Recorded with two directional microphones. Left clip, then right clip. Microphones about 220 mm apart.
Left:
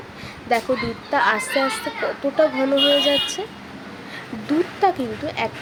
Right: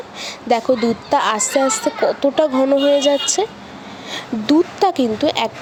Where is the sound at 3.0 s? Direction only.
30° right (ahead or behind).